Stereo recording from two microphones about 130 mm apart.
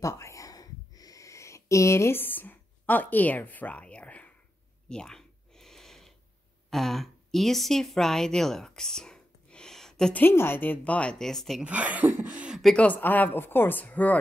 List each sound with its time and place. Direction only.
0.0 s a sound: 25° left (ahead or behind); by 10.2 s 5° left (ahead or behind)
10.2 s a woman's voice: 15° left (ahead or behind)
11.6 s speech: 10° right (ahead or behind)
12.7 s a woman's voice: 10° left (ahead or behind)